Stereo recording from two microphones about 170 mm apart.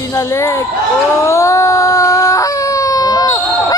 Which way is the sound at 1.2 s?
15° left (ahead or behind).